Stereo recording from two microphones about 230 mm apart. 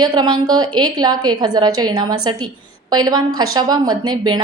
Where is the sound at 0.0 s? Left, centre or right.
Centre.